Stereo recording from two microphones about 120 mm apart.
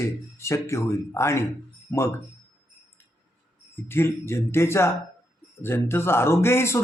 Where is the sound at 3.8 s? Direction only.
20° left (ahead or behind).